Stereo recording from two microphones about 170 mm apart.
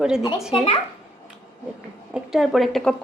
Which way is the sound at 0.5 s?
35° left (ahead or behind).